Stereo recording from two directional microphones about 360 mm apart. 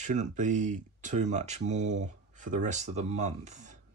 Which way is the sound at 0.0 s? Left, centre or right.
Centre.